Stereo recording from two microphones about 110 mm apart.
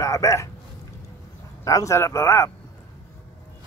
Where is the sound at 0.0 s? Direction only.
30° left (ahead or behind).